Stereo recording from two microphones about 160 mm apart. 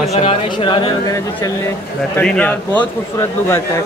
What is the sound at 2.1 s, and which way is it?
A man's voice, 10° left (ahead or behind).